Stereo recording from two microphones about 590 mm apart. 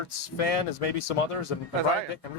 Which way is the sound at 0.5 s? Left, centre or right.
Left.